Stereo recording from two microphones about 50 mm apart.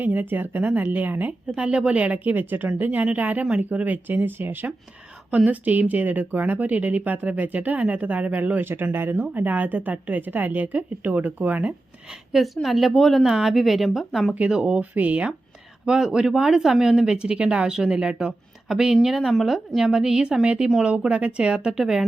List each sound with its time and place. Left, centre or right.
0.0 s speech: right
1.5 s speech: right
5.5 s speech: right
8.6 s speech: right
12.6 s a woman's voice: centre
14.3 s speech: right
15.9 s a woman's voice: centre
19.8 s speech: centre